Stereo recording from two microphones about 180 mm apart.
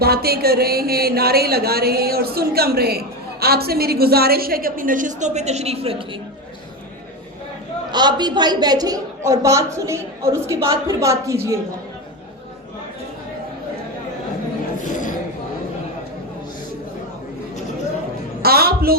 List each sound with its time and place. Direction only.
0.0 s a woman's voice: 60° right (ahead or behind); by 6.0 s 35° right (ahead or behind)
7.9 s a woman's voice: 25° right (ahead or behind)
18.4 s a woman's voice: 60° right (ahead or behind)